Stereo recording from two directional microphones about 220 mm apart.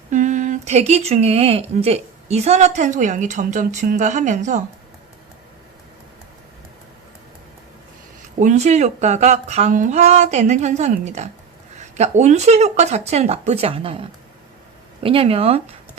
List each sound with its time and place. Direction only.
0.1 s speech: 35° right (ahead or behind)
8.4 s speech: 30° right (ahead or behind)